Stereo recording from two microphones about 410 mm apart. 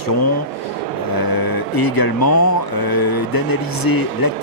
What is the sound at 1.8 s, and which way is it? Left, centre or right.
Speech, left.